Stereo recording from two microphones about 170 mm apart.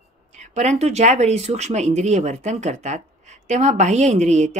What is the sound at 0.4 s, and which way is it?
Speech, 40° right (ahead or behind).